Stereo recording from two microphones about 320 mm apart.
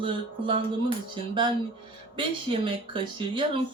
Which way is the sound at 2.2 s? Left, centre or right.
Centre.